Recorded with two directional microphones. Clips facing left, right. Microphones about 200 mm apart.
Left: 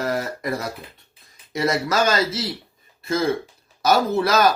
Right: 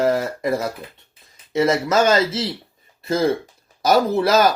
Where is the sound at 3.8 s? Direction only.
30° right (ahead or behind).